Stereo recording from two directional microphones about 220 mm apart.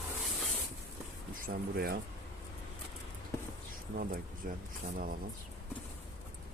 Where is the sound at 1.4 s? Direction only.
45° right (ahead or behind).